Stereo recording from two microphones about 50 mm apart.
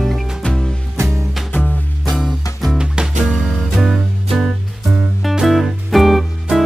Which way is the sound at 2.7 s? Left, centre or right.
Centre.